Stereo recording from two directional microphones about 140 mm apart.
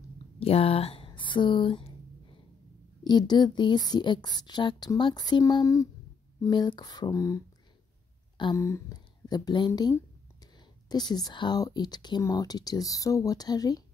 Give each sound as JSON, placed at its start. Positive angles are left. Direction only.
{"t": 0.4, "sound": "speech", "side_deg": 45}
{"t": 3.0, "sound": "speech", "side_deg": 30}
{"t": 8.5, "sound": "speech", "side_deg": 20}